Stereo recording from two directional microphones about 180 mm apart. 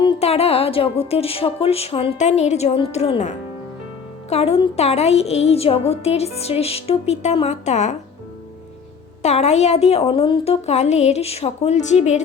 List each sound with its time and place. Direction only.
0.0 s a woman's voice: 35° left (ahead or behind)
9.2 s a woman's voice: 40° left (ahead or behind)